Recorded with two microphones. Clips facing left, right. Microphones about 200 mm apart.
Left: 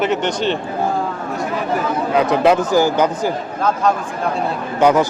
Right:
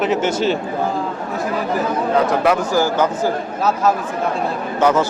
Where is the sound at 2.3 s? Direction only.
20° left (ahead or behind).